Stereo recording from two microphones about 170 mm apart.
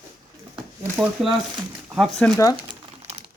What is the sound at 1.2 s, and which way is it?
Speech, centre (ahead or behind).